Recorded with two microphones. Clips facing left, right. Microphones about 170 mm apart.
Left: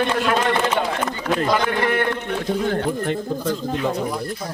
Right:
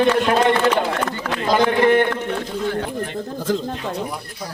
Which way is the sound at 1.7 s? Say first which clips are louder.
Right 6 dB; 20° right (ahead or behind).